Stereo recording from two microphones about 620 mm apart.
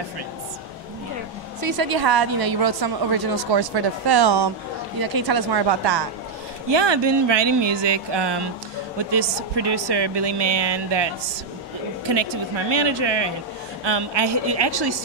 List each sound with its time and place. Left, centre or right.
1.6 s a woman's voice: right
12.1 s a woman's voice: right